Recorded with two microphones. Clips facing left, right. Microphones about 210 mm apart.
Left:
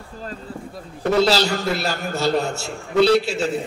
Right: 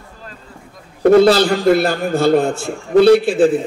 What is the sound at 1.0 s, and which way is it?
A man's voice, 55° right (ahead or behind).